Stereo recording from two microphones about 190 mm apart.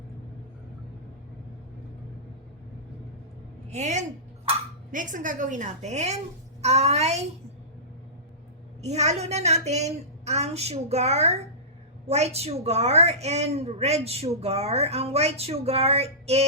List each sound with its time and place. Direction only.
3.7 s a woman's voice: 35° right (ahead or behind)
4.5 s a sound: 30° right (ahead or behind)
4.9 s a woman's voice: 45° right (ahead or behind)
8.8 s a woman's voice: 35° right (ahead or behind)